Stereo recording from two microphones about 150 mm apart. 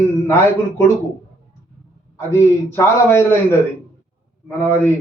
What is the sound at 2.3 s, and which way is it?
A man's voice, 15° left (ahead or behind).